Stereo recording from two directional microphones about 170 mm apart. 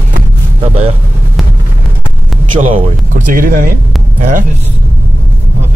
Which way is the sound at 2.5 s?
50° right (ahead or behind).